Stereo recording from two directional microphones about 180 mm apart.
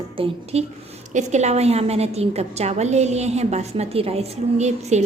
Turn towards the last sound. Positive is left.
turn(degrees=-40)  # may be behind; listen again after turning